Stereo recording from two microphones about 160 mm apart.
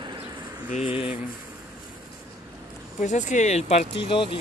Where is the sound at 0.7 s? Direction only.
40° left (ahead or behind).